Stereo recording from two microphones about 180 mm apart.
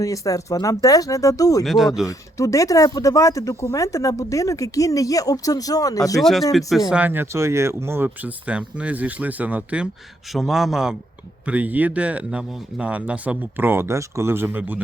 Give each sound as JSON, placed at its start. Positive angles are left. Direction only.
{"t": 0.0, "sound": "speech", "side_deg": 20}
{"t": 1.6, "sound": "a man's voice", "side_deg": 0}
{"t": 2.0, "sound": "speech", "side_deg": 20}
{"t": 6.1, "sound": "a man's voice", "side_deg": 0}